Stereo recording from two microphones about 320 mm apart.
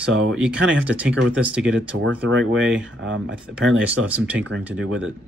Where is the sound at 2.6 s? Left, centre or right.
Centre.